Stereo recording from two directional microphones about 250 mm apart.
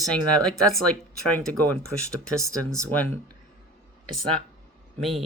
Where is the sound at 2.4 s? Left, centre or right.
Centre.